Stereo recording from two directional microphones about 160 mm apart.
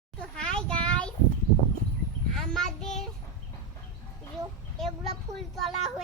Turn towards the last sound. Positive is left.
turn(degrees=0)  # may be behind; listen again after turning